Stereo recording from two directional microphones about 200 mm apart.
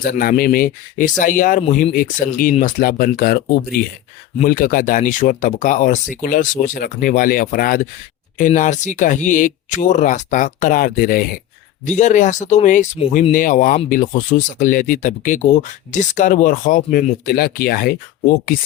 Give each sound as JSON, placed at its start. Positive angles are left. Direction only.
{"t": 0.0, "sound": "speech", "side_deg": 45}
{"t": 4.4, "sound": "speech", "side_deg": 45}